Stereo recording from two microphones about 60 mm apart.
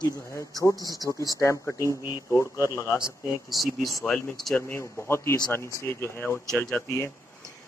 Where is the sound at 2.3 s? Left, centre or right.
Left.